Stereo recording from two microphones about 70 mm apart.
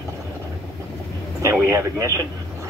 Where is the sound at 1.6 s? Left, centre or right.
Right.